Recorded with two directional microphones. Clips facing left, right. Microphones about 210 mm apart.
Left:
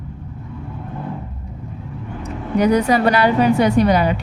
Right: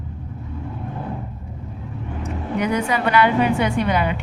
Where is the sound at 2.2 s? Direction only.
35° left (ahead or behind).